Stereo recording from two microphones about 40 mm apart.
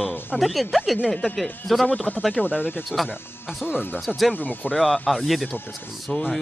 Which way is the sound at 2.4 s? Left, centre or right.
Left.